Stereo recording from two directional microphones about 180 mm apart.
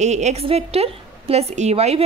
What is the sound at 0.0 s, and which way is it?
A woman's voice, 40° right (ahead or behind).